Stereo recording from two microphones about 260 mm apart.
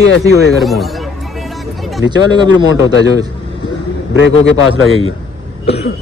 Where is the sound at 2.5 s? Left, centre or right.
Left.